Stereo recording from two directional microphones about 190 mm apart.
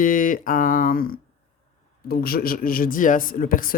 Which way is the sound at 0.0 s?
45° left (ahead or behind).